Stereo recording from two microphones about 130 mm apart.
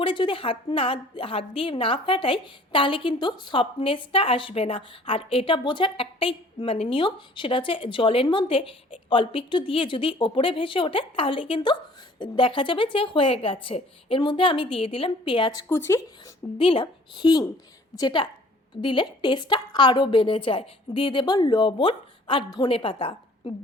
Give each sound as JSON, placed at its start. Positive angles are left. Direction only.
{"t": 0.0, "sound": "a woman's voice", "side_deg": 40}
{"t": 15.7, "sound": "speech", "side_deg": 20}
{"t": 16.6, "sound": "a woman's voice", "side_deg": 45}